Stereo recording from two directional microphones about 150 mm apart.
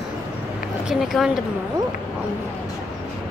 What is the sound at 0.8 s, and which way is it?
Speech, centre (ahead or behind).